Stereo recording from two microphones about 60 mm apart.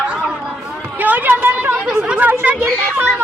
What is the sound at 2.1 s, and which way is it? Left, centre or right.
Chatter, right.